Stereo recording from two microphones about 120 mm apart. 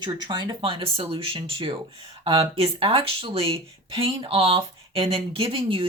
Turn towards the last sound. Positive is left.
turn(degrees=-50)  # may be behind; listen again after turning